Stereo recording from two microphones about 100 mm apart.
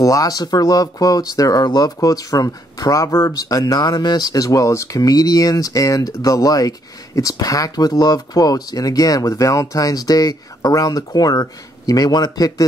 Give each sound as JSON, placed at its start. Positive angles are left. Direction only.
{"t": 0.0, "sound": "speech", "side_deg": 35}